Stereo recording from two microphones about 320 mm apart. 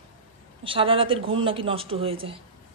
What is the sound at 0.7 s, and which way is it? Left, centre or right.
Speech, centre.